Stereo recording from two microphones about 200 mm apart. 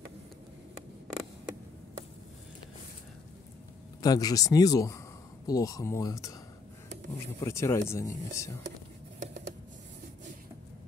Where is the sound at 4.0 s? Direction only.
20° left (ahead or behind).